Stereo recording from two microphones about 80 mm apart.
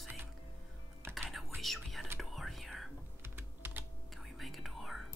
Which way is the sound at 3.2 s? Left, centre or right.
Right.